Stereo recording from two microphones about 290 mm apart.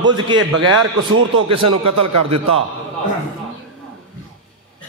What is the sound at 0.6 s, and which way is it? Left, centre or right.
Speech, right.